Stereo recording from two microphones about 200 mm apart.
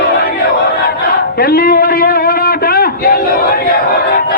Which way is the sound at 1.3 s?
45° left (ahead or behind).